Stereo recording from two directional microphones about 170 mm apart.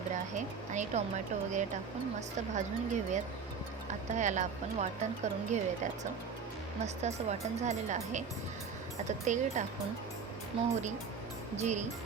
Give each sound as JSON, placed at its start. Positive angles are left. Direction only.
{"t": 0.3, "sound": "speech", "side_deg": -45}
{"t": 11.5, "sound": "speech", "side_deg": -45}